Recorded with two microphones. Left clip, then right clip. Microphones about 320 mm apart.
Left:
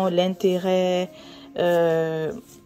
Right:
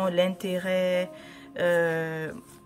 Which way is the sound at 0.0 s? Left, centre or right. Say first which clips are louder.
Left 4 dB; centre.